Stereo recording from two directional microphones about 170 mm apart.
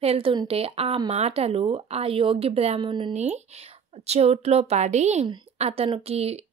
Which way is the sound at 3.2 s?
40° right (ahead or behind).